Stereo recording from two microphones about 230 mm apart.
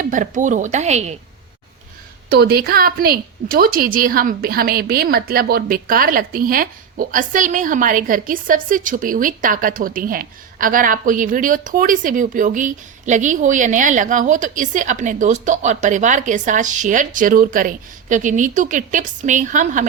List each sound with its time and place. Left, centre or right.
0.0 s a woman's voice: right
2.3 s a woman's voice: right